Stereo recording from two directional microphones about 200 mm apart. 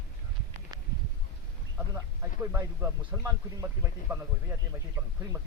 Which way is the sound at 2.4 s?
10° right (ahead or behind).